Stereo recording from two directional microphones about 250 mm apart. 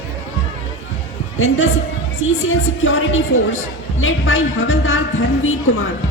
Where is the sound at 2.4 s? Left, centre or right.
Left.